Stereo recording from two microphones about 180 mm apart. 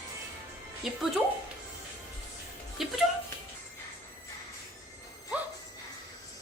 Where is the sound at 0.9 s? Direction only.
Centre (ahead or behind).